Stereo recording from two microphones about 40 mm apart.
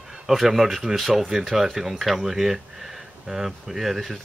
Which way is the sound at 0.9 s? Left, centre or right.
Centre.